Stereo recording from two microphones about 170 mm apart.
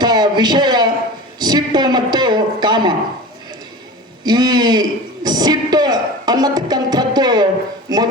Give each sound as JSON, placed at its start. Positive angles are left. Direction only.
{"t": 0.0, "sound": "a sound", "side_deg": -25}
{"t": 1.4, "sound": "a man's voice", "side_deg": -25}
{"t": 4.2, "sound": "a man's voice", "side_deg": -25}